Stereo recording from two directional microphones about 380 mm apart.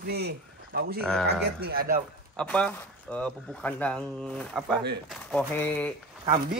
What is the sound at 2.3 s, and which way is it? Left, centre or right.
Speech, centre.